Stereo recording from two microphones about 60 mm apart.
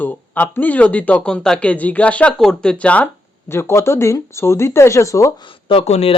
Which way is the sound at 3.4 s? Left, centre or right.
Left.